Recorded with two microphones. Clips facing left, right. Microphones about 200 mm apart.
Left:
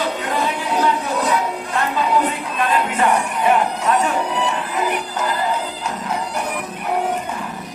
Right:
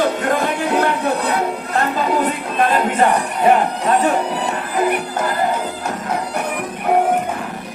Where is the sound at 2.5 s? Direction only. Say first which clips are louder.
Right 4 dB; 45° right (ahead or behind).